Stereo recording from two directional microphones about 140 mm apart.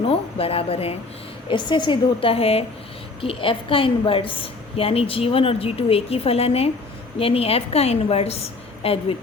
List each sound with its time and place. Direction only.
0.1 s speech: 45° left (ahead or behind)
1.5 s a woman's voice: 35° left (ahead or behind)